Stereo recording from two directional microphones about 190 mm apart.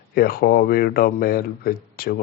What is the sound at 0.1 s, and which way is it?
Speech, 50° left (ahead or behind).